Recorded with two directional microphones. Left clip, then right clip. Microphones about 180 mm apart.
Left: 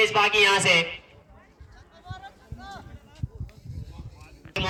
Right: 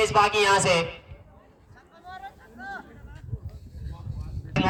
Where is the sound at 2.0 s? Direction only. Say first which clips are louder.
Right 3 dB; 25° left (ahead or behind).